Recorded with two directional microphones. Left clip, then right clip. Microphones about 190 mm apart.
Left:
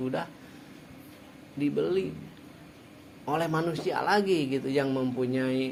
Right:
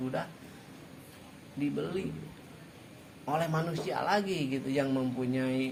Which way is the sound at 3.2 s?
30° left (ahead or behind).